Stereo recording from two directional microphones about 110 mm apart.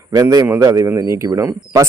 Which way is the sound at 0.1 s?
35° right (ahead or behind).